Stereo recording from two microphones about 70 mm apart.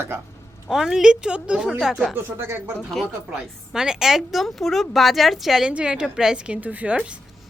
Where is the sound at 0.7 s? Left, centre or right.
Centre.